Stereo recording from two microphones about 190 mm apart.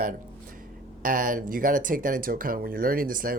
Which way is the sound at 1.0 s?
45° right (ahead or behind).